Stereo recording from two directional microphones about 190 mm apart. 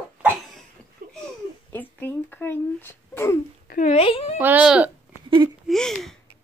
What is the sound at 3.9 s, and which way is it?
Speech, 30° left (ahead or behind).